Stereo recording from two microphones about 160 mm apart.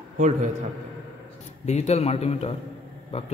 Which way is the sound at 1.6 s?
45° left (ahead or behind).